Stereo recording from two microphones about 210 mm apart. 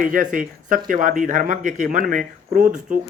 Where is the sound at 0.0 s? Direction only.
40° right (ahead or behind).